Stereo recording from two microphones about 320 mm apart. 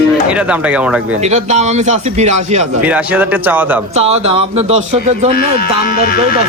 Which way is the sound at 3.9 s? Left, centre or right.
Centre.